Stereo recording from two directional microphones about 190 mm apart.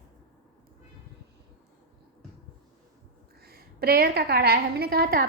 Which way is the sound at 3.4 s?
55° right (ahead or behind).